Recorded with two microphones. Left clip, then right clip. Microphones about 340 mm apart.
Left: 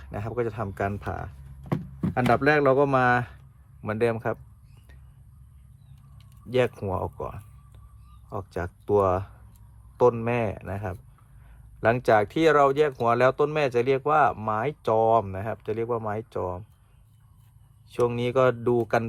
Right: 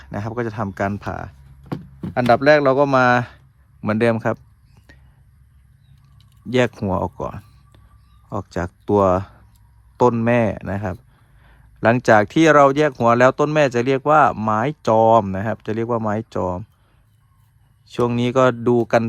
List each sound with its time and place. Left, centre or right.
0.0 s speech: right
1.7 s a sound: centre
2.1 s speech: right
6.5 s speech: right
17.8 s speech: right